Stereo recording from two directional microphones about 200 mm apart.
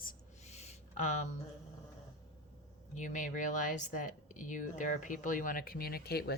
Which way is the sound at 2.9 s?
40° left (ahead or behind).